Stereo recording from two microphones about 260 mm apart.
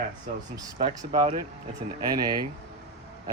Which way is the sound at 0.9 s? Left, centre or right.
Centre.